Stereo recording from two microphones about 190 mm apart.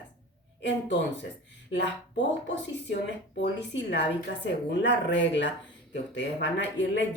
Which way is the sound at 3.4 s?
65° left (ahead or behind).